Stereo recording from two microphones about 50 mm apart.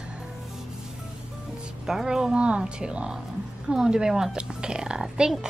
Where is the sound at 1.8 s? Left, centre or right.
Centre.